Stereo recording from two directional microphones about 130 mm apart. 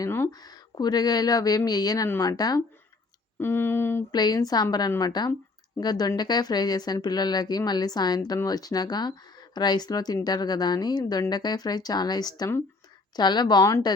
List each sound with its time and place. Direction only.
0.0 s a sound: 20° left (ahead or behind)
0.3 s speech: 30° left (ahead or behind)
3.3 s speech: 20° left (ahead or behind)
4.1 s a woman's voice: 30° left (ahead or behind)